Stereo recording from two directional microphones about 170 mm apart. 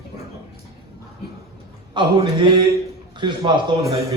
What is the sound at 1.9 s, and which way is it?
A man's voice, 30° right (ahead or behind).